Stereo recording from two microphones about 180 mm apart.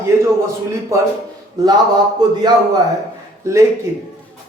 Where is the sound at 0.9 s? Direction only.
15° right (ahead or behind).